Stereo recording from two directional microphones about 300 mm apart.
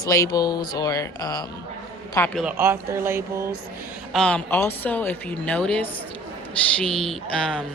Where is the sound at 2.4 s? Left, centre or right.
Centre.